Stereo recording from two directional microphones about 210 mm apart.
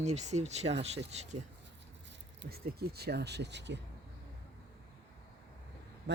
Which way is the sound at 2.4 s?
50° right (ahead or behind).